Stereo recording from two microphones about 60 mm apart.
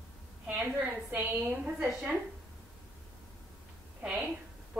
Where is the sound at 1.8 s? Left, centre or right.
Centre.